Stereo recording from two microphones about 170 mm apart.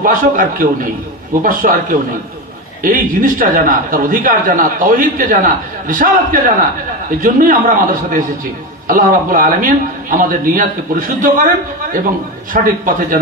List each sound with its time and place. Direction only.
0.0 s a man's voice: 55° right (ahead or behind)
12.6 s a man's voice: 50° right (ahead or behind)